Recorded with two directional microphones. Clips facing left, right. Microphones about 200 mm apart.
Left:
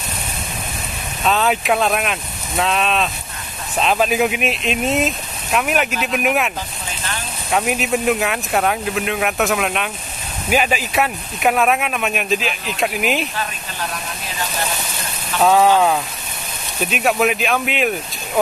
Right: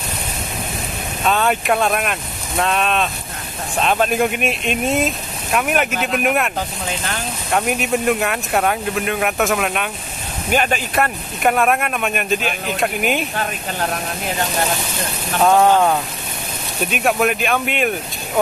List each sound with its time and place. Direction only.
1.2 s speech: centre (ahead or behind)
7.5 s speech: centre (ahead or behind)
13.4 s speech: 55° right (ahead or behind)
15.4 s speech: centre (ahead or behind)